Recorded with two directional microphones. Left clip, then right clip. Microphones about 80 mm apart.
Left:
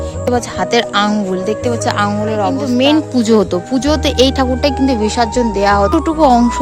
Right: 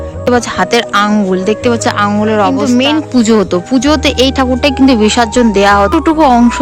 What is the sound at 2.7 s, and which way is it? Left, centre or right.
Speech, centre.